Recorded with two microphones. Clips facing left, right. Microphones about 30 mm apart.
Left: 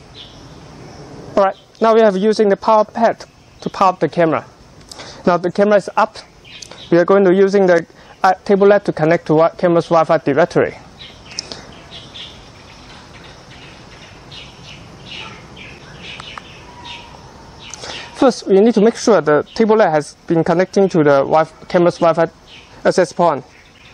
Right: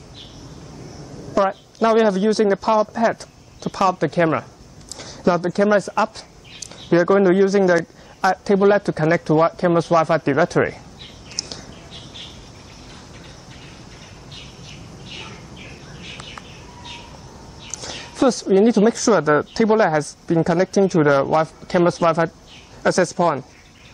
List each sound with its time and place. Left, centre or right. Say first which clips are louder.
0.8 s a man's voice: left 3 dB; centre
11.3 s bird: left 2 dB; left
15.0 s bird: left 5 dB; centre
17.6 s a sound: left 4 dB; left
18.5 s a woman's voice: left 3 dB; centre